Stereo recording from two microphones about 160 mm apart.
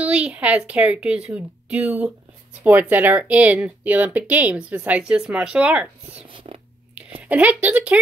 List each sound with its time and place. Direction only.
0.0 s speech: 10° right (ahead or behind)
6.3 s a sound: 35° right (ahead or behind)
7.0 s speech: 10° right (ahead or behind)